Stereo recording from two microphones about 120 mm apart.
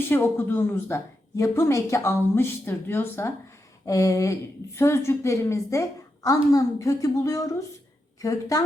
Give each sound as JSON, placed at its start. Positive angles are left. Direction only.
{"t": 0.0, "sound": "a woman's voice", "side_deg": 20}